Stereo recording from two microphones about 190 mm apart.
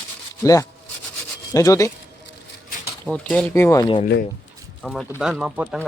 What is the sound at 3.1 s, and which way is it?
Speech, 5° left (ahead or behind).